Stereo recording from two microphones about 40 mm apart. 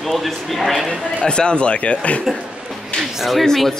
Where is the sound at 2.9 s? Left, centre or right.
Centre.